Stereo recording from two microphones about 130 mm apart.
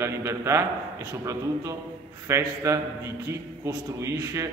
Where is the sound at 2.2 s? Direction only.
20° right (ahead or behind).